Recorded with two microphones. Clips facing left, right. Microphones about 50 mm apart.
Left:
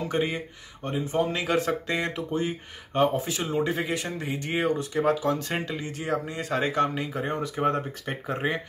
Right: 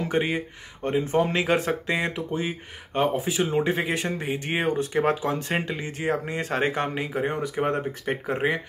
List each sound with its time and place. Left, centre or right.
0.1 s speech: right
0.8 s speech: right
1.3 s speech: right
3.5 s speech: right
7.1 s speech: centre